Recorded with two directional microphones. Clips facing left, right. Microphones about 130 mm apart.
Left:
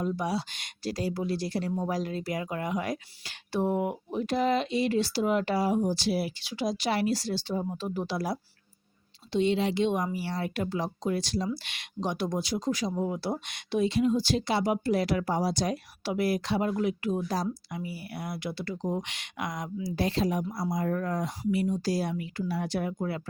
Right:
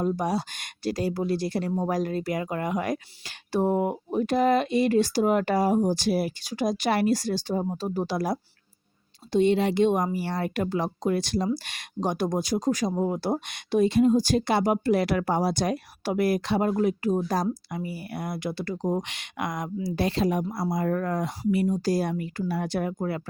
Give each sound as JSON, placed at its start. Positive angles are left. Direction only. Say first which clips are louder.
{"t": 0.0, "sound": "speech", "louder": "right 4 dB", "side_deg": -45}
{"t": 11.4, "sound": "speech", "louder": "right 5 dB", "side_deg": -45}